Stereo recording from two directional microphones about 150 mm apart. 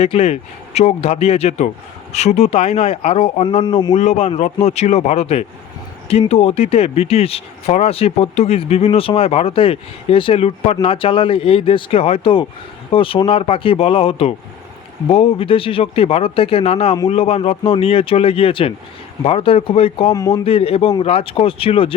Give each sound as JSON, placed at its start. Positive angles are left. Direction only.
{"t": 0.0, "sound": "speech", "side_deg": 45}
{"t": 3.6, "sound": "speech", "side_deg": 30}
{"t": 3.9, "sound": "speech", "side_deg": 50}
{"t": 20.1, "sound": "speech", "side_deg": 20}
{"t": 20.4, "sound": "speech", "side_deg": 40}